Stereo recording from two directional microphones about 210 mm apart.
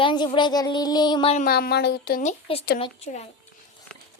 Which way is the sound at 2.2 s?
30° left (ahead or behind).